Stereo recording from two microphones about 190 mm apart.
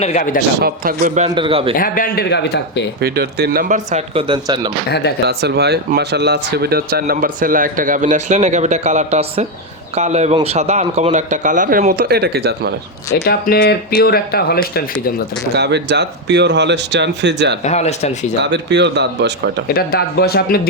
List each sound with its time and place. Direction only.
0.0 s speech: 40° left (ahead or behind)
0.6 s speech: 45° right (ahead or behind)
1.4 s speech: 30° right (ahead or behind)
1.7 s a man's voice: 50° left (ahead or behind)
3.0 s speech: 60° right (ahead or behind); by 4.2 s 40° right (ahead or behind)
4.3 s speech: 25° right (ahead or behind)
4.9 s a man's voice: 60° left (ahead or behind)
5.2 s a man's voice: 60° right (ahead or behind)
13.2 s a man's voice: 55° left (ahead or behind)
15.5 s speech: 60° right (ahead or behind)
17.6 s speech: 35° left (ahead or behind)
18.4 s speech: 65° right (ahead or behind)
19.6 s a man's voice: 55° left (ahead or behind)